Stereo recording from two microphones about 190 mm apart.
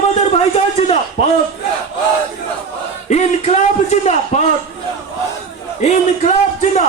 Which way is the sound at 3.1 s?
35° left (ahead or behind).